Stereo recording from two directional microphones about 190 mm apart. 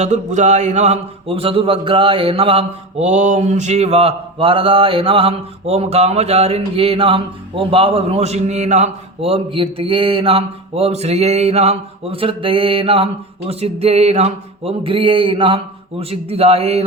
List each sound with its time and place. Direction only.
0.0 s a man's voice: 40° right (ahead or behind)